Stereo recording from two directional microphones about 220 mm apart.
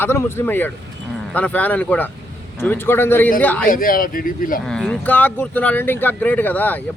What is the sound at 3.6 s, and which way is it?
Speech, 40° left (ahead or behind).